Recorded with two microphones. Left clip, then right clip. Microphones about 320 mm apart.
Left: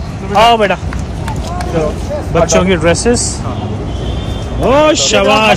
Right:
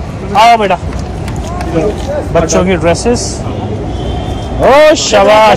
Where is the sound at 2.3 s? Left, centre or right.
Centre.